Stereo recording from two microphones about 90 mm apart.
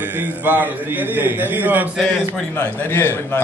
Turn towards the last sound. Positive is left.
turn(degrees=25)  # may be behind; listen again after turning